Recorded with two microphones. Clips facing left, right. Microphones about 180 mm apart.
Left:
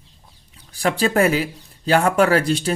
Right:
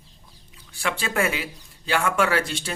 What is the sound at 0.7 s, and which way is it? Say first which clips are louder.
Speech: left 8 dB; 35° left (ahead or behind).